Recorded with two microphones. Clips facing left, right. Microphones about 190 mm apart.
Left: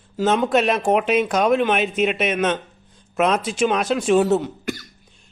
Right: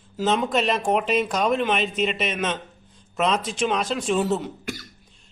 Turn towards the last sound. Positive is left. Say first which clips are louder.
# left 6 dB
turn(degrees=0)  # may be behind; listen again after turning